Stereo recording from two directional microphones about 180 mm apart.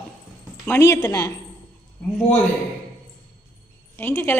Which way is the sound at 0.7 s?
15° left (ahead or behind).